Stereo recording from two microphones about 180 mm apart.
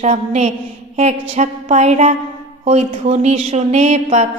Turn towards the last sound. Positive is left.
turn(degrees=-40)  # may be behind; listen again after turning